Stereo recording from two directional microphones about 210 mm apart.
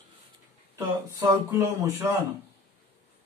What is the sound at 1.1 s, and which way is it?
Speech, 15° right (ahead or behind).